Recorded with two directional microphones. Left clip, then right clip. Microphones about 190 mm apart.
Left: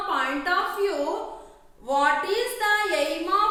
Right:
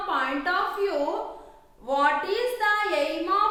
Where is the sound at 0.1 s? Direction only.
10° right (ahead or behind).